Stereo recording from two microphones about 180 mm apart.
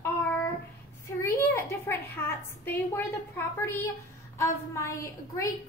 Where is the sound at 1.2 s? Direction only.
15° left (ahead or behind).